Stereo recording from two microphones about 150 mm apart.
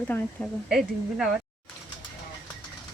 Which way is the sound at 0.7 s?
5° right (ahead or behind).